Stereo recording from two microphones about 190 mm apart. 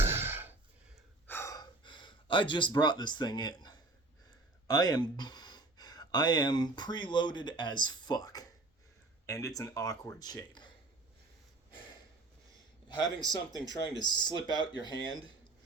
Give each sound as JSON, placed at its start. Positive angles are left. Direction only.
{"t": 0.0, "sound": "a sound", "side_deg": -10}
{"t": 1.3, "sound": "gasp", "side_deg": 15}
{"t": 2.0, "sound": "speech", "side_deg": 25}
{"t": 4.7, "sound": "speech", "side_deg": 20}
{"t": 8.0, "sound": "a sound", "side_deg": 20}
{"t": 9.2, "sound": "speech", "side_deg": 15}
{"t": 12.9, "sound": "speech", "side_deg": 20}